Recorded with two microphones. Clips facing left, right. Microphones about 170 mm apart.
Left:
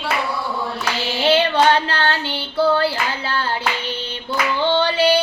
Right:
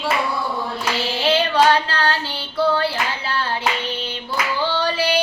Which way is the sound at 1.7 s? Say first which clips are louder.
Left 1 dB; 25° left (ahead or behind).